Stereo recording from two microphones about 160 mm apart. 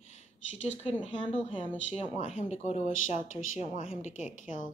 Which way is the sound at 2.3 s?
45° left (ahead or behind).